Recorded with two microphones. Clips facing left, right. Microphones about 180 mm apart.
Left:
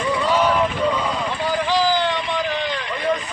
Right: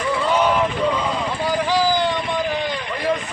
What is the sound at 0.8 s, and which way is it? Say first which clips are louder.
Vehicle: even; centre (ahead or behind).